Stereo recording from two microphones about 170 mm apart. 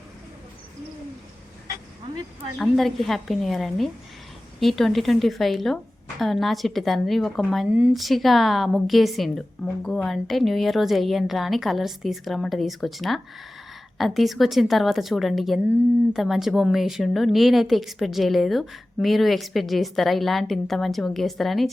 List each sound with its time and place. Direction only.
2.6 s a woman's voice: centre (ahead or behind)